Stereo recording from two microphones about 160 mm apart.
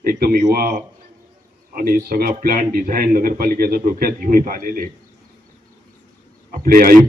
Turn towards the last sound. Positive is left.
turn(degrees=-65)  # may be behind; listen again after turning